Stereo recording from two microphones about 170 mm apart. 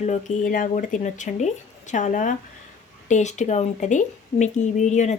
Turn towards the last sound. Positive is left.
turn(degrees=45)  # may be behind; listen again after turning